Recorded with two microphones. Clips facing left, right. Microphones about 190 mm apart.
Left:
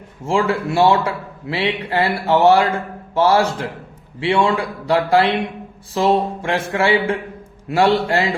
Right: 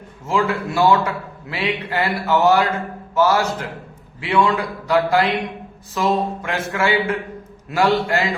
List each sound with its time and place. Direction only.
0.3 s a man's voice: 30° left (ahead or behind)